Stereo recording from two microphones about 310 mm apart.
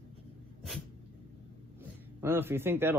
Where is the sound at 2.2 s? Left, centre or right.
Centre.